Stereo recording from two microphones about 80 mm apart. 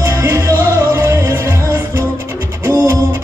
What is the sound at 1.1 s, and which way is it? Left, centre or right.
Music, right.